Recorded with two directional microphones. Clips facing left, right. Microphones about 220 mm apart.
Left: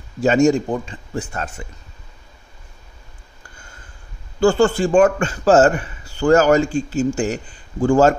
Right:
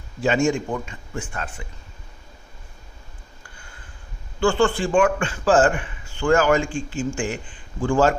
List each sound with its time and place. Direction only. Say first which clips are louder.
0.2 s a man's voice: left 6 dB; 40° left (ahead or behind)
4.4 s a man's voice: left 5 dB; 40° left (ahead or behind)